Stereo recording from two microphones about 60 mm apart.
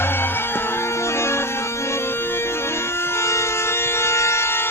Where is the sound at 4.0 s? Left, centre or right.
Left.